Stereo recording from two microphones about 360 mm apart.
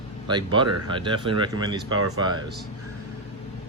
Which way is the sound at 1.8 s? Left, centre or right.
Right.